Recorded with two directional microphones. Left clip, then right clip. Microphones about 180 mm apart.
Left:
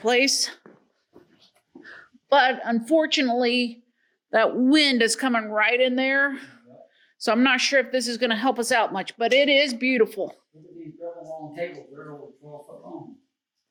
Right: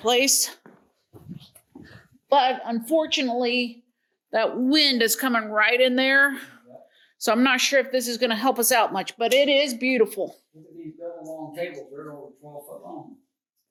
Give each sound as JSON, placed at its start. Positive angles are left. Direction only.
{"t": 0.0, "sound": "speech", "side_deg": 10}
{"t": 1.8, "sound": "a woman's voice", "side_deg": 25}
{"t": 4.9, "sound": "speech", "side_deg": 10}